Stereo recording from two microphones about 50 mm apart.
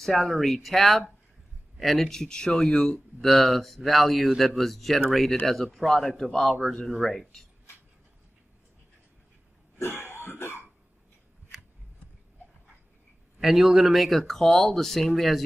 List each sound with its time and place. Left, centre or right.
0.0 s speech: centre
3.2 s speech: centre
9.8 s throat clearing: left
13.4 s speech: centre